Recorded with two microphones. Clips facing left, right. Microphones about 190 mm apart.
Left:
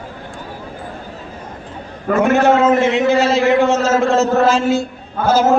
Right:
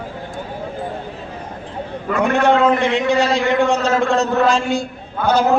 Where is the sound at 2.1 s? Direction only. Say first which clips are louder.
Left 4 dB; 50° left (ahead or behind).